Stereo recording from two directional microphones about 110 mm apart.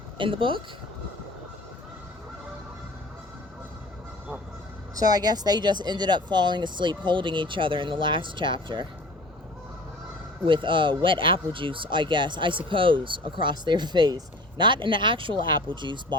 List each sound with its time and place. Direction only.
0.2 s speech: 50° right (ahead or behind)
4.9 s speech: 35° right (ahead or behind)
10.4 s speech: 50° right (ahead or behind)